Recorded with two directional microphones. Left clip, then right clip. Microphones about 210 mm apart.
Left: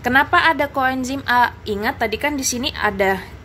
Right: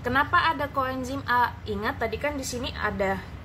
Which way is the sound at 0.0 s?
35° left (ahead or behind).